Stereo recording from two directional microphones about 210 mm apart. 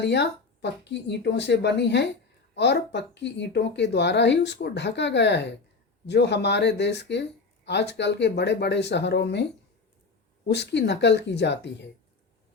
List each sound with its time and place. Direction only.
0.0 s speech: 55° left (ahead or behind)